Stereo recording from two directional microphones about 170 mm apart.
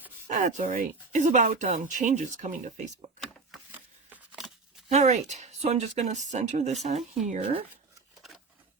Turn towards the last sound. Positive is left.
turn(degrees=-35)  # may be behind; listen again after turning